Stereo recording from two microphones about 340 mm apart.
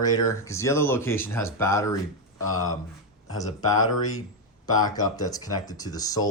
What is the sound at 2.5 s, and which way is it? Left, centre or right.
Speech, left.